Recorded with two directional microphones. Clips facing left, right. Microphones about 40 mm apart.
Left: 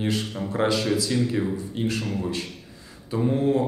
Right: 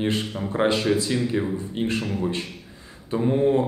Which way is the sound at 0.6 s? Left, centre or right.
Right.